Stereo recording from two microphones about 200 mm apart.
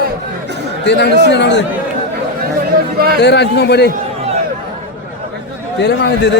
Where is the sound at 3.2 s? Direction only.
60° left (ahead or behind).